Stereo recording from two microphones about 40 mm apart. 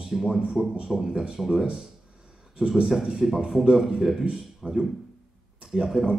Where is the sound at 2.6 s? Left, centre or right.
Right.